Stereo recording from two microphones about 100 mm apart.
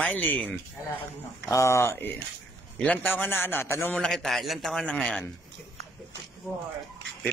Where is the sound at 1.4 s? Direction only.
30° left (ahead or behind).